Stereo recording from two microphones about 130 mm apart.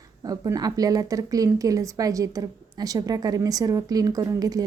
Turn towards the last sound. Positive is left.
turn(degrees=-30)  # may be behind; listen again after turning